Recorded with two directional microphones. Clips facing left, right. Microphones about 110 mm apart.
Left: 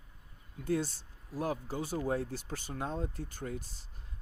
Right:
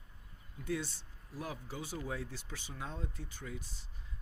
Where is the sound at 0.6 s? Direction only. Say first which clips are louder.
Left 6 dB; 40° left (ahead or behind).